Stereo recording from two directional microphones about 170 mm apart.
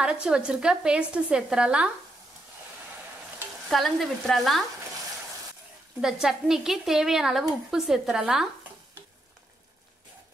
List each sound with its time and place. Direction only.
0.0 s a woman's voice: 5° right (ahead or behind)
3.6 s a woman's voice: centre (ahead or behind)
5.9 s a woman's voice: 5° right (ahead or behind)